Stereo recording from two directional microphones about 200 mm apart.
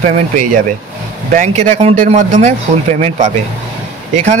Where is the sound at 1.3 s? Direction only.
35° right (ahead or behind).